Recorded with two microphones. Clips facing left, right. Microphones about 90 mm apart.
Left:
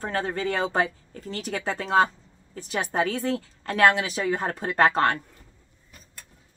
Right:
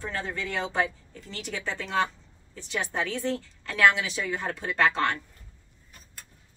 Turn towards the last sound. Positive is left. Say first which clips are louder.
# left 4 dB
turn(degrees=40)  # may be behind; listen again after turning